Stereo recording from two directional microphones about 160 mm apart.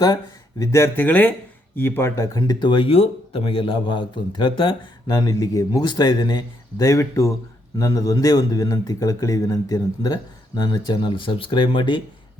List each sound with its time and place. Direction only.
0.6 s speech: 15° left (ahead or behind)